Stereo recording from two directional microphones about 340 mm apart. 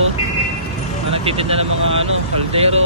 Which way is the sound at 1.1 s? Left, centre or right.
Centre.